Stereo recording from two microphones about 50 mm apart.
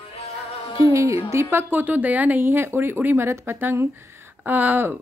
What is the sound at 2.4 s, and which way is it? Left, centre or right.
Speech, right.